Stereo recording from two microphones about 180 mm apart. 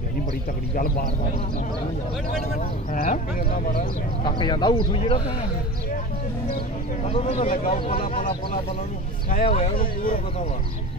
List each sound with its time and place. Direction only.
0.7 s speech: 55° left (ahead or behind)
2.4 s speech: 45° left (ahead or behind)
4.2 s speech: 25° left (ahead or behind)
7.1 s speech: 35° left (ahead or behind)
7.3 s speech: 50° left (ahead or behind)
9.4 s speech: 30° left (ahead or behind)
9.8 s speech: 50° left (ahead or behind)